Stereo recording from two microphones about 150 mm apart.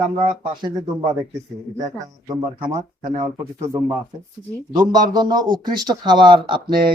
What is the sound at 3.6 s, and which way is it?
A man's voice, 20° right (ahead or behind).